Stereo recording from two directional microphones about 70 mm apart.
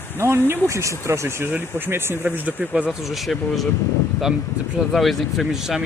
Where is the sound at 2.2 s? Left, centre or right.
Right.